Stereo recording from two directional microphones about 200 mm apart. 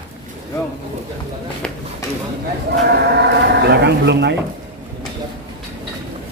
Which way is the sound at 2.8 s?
55° right (ahead or behind).